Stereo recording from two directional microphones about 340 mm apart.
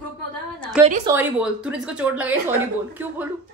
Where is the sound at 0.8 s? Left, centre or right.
Centre.